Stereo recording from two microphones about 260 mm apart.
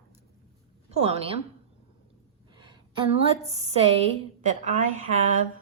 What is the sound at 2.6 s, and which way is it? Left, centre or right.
A woman's voice, centre.